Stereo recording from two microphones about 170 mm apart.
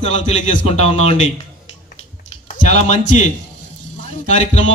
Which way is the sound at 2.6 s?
40° left (ahead or behind).